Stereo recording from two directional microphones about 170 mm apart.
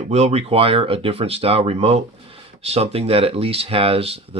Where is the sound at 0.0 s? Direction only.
40° right (ahead or behind).